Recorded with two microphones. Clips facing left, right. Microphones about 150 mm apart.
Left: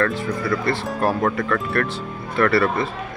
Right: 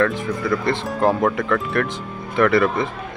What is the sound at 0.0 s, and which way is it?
Speech, 15° right (ahead or behind).